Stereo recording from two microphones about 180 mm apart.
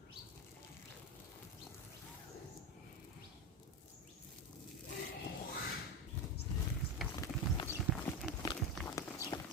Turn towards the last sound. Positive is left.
turn(degrees=20)  # may be behind; listen again after turning